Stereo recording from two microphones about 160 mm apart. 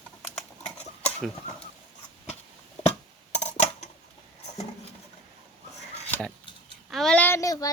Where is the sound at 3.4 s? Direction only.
45° left (ahead or behind).